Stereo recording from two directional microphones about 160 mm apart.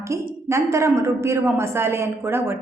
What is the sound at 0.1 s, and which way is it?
A woman's voice, 20° right (ahead or behind).